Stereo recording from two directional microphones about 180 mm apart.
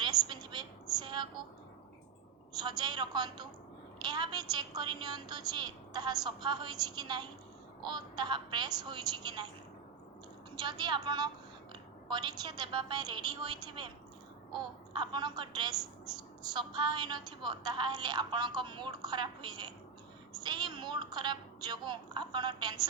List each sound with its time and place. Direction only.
0.0 s a sound: 25° right (ahead or behind)
2.6 s a woman's voice: 25° right (ahead or behind)
10.6 s a woman's voice: 25° right (ahead or behind)
14.9 s a woman's voice: 25° right (ahead or behind)